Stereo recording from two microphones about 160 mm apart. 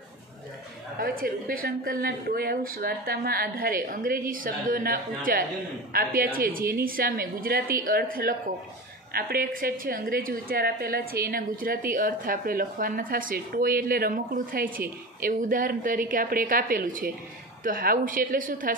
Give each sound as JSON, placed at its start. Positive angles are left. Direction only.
{"t": 0.9, "sound": "speech", "side_deg": -65}